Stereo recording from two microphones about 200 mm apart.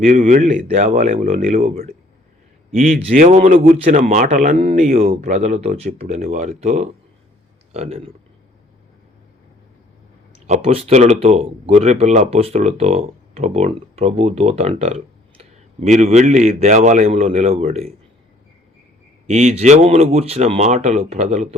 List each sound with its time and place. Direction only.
0.0 s speech: 35° right (ahead or behind)
3.0 s speech: 35° right (ahead or behind)
10.4 s speech: 30° right (ahead or behind)
19.3 s speech: 35° right (ahead or behind)